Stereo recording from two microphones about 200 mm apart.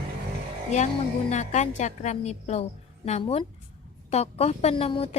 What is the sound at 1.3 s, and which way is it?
A woman's voice, 35° left (ahead or behind).